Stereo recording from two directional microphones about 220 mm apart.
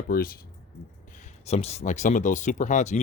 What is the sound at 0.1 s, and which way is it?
Speech, 40° left (ahead or behind).